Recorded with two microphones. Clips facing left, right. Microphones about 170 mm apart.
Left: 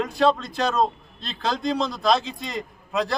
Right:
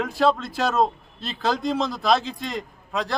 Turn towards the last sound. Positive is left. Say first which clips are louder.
# left 3 dB
turn(degrees=0)  # may be behind; listen again after turning